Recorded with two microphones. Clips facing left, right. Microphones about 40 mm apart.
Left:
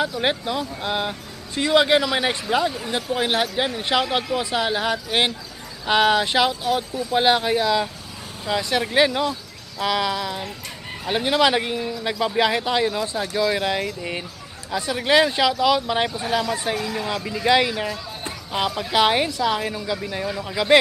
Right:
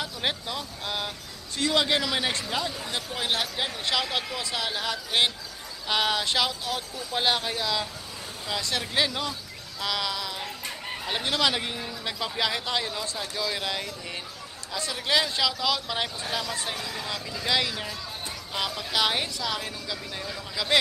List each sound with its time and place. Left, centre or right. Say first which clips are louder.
0.2 s speech: left 7 dB; centre
13.8 s speech: left 8 dB; left